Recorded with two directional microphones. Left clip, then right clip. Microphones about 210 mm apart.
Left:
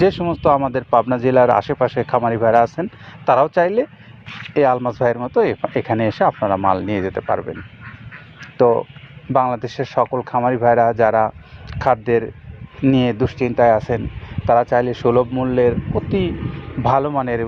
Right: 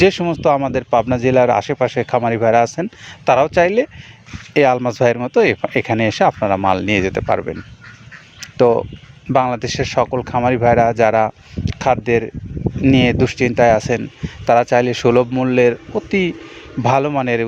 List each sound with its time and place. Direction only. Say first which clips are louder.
0.0 s speech: right 2 dB; 35° right (ahead or behind)
8.4 s duck: right 1 dB; 35° right (ahead or behind)
9.3 s speech: right 1 dB; 40° right (ahead or behind)